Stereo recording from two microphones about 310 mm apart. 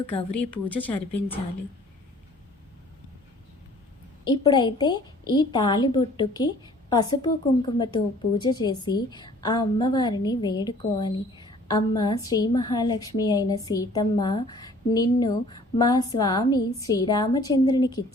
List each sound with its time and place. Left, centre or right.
0.0 s speech: centre
4.2 s a woman's voice: centre